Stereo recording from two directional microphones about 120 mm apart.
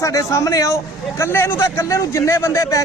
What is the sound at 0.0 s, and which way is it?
A man's voice, 25° left (ahead or behind).